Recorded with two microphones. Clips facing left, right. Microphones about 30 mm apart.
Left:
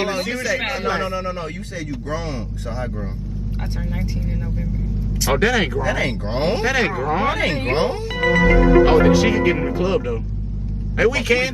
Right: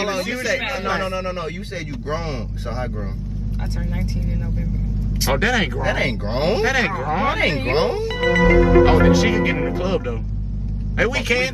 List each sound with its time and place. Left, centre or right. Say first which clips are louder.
0.2 s speech: even; centre
1.0 s speech: even; centre
3.9 s speech: even; centre
5.8 s speech: even; right
6.6 s speech: even; centre